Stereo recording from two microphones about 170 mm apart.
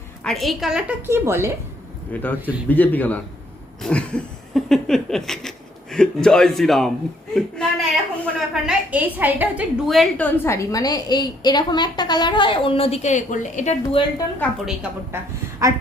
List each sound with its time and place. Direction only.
0.2 s a woman's voice: centre (ahead or behind); by 1.5 s 15° right (ahead or behind)
2.1 s speech: 10° left (ahead or behind)
3.8 s a sound: 5° left (ahead or behind)
7.3 s a woman's voice: 5° left (ahead or behind); by 13.7 s 45° left (ahead or behind)
13.8 s a woman's voice: 20° left (ahead or behind)
15.1 s speech: 15° right (ahead or behind)